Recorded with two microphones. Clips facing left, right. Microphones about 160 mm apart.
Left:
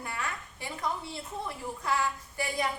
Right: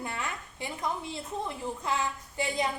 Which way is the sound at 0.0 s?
20° right (ahead or behind).